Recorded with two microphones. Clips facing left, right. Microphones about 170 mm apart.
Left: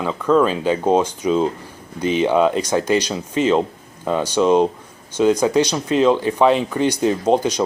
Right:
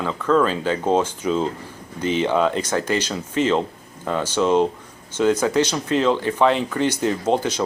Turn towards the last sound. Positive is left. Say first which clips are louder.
# left 4 dB
turn(degrees=15)  # may be behind; listen again after turning